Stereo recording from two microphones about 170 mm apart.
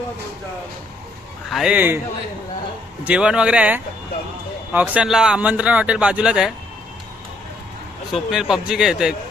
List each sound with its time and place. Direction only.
1.5 s a man's voice: 5° right (ahead or behind)
3.0 s a man's voice: 5° right (ahead or behind)
8.1 s speech: centre (ahead or behind)